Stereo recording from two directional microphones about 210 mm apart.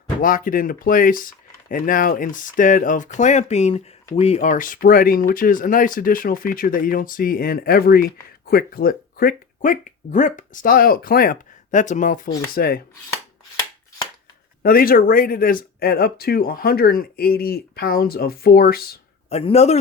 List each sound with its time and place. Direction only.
0.2 s speech: 40° left (ahead or behind)
14.6 s speech: 45° left (ahead or behind)
19.3 s speech: 30° left (ahead or behind)